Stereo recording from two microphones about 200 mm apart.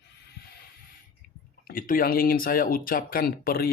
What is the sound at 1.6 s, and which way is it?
Speech, 45° left (ahead or behind).